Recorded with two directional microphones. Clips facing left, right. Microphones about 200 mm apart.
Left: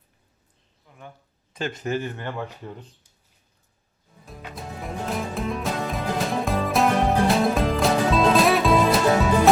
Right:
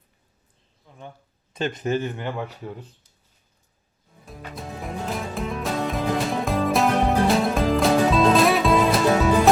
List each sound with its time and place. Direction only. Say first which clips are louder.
1.5 s speech: right 3 dB; 20° right (ahead or behind)
4.3 s music: right 1 dB; centre (ahead or behind)